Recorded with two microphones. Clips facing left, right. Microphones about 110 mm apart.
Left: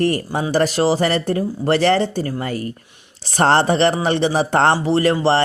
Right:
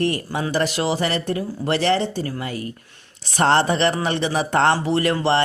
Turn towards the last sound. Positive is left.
turn(degrees=30)  # may be behind; listen again after turning